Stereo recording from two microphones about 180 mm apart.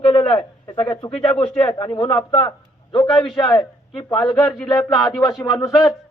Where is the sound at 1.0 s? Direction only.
25° left (ahead or behind).